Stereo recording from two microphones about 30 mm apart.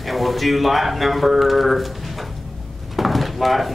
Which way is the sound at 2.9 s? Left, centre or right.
Centre.